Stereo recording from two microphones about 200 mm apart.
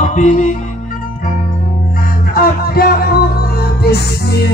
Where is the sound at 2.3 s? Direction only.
50° left (ahead or behind).